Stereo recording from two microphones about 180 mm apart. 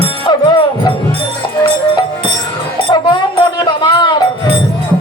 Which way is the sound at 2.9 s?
25° left (ahead or behind).